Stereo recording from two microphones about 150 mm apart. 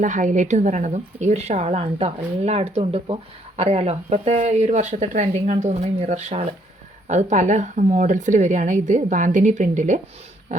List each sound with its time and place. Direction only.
0.0 s a woman's voice: 60° right (ahead or behind)